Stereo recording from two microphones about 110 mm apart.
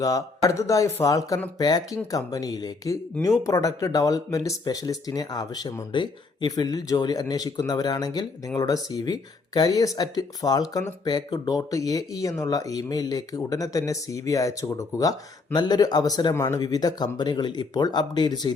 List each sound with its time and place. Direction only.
0.0 s speech: 30° left (ahead or behind)